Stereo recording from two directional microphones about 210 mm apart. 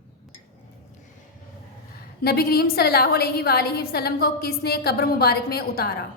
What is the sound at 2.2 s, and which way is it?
A woman's voice, 50° left (ahead or behind).